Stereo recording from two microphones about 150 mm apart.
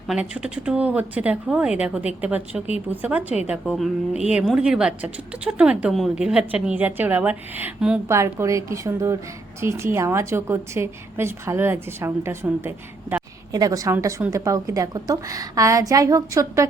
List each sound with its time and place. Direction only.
0.1 s a woman's voice: 5° right (ahead or behind); by 16.6 s 20° right (ahead or behind)